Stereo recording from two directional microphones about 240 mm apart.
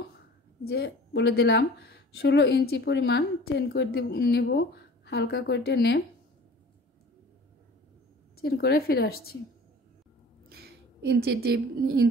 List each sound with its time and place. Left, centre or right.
0.7 s speech: left
8.4 s a woman's voice: left
10.5 s a woman's voice: right